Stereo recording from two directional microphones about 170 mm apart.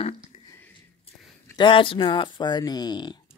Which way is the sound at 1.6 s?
30° left (ahead or behind).